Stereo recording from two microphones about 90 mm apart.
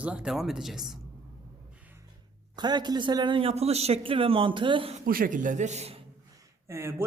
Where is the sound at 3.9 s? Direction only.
85° right; by 4.9 s 65° right (ahead or behind).